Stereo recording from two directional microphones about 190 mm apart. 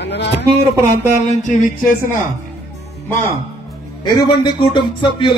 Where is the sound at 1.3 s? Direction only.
40° left (ahead or behind).